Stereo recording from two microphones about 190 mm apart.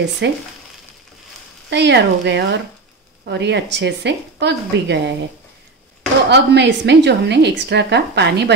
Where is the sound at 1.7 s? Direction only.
65° right (ahead or behind).